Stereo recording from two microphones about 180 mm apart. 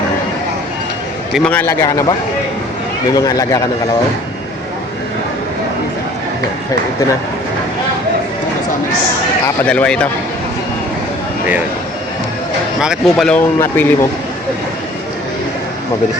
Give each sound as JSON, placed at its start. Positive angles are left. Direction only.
{"t": 1.5, "sound": "speech", "side_deg": 10}
{"t": 9.6, "sound": "speech", "side_deg": 5}
{"t": 12.8, "sound": "speech", "side_deg": 0}